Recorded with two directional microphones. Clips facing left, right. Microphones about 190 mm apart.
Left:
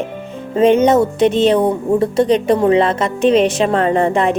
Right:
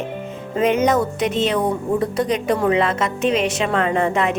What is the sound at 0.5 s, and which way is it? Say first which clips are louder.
Speech: left 6 dB; 30° left (ahead or behind).